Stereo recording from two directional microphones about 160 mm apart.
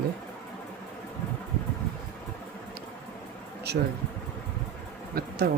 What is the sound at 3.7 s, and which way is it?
Speech, 90° right.